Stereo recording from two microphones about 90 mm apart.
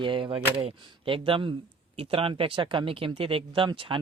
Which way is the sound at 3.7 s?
65° right (ahead or behind).